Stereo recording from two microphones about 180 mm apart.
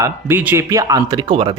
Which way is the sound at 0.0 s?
10° right (ahead or behind).